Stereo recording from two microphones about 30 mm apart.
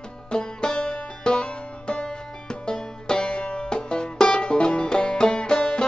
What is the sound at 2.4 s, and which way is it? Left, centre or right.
Music, left.